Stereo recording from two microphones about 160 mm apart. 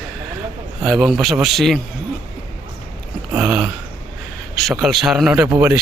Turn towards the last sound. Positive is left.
turn(degrees=-5)  # may be behind; listen again after turning